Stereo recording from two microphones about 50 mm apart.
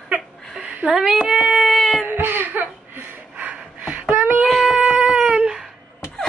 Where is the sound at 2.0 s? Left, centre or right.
Right.